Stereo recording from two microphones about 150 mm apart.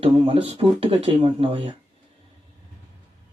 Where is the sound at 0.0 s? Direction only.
40° right (ahead or behind).